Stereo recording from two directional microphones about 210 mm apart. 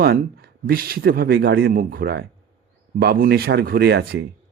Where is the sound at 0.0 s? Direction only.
45° right (ahead or behind).